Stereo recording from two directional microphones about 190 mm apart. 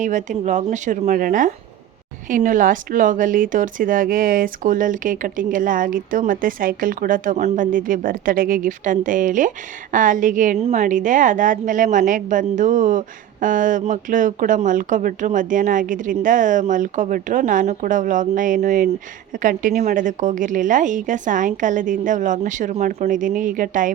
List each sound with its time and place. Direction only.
0.0 s a woman's voice: 40° right (ahead or behind)